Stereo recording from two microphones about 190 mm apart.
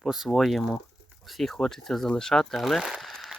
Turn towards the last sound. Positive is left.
turn(degrees=0)  # may be behind; listen again after turning